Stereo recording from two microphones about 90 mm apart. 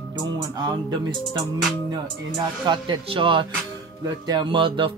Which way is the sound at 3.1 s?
75° right (ahead or behind).